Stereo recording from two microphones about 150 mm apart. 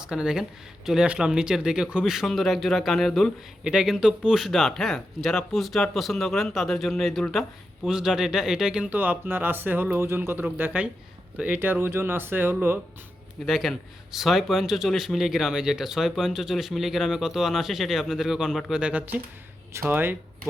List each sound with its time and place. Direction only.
0.0 s speech: 5° right (ahead or behind)
13.4 s speech: centre (ahead or behind)